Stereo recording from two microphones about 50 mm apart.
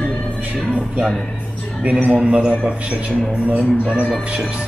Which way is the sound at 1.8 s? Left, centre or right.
Right.